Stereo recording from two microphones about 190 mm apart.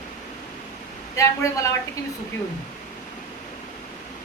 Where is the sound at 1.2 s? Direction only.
15° left (ahead or behind).